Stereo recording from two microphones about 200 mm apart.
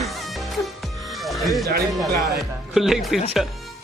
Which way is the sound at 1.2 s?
Centre (ahead or behind).